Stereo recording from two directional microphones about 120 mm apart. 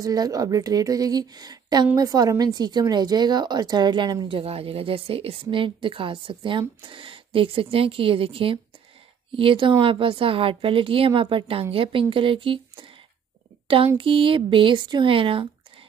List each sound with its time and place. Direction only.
0.0 s a woman's voice: 30° right (ahead or behind)
13.9 s speech: 50° right (ahead or behind)